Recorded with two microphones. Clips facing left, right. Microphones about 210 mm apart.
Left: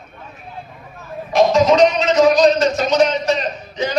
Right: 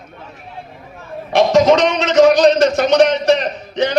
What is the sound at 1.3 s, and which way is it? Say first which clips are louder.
A man's voice: right 2 dB; 80° right.